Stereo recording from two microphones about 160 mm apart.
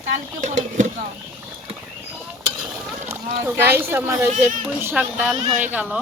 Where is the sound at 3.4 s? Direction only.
15° right (ahead or behind).